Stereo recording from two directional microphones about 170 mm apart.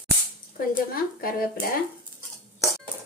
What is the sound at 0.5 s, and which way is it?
Speech, 55° left (ahead or behind).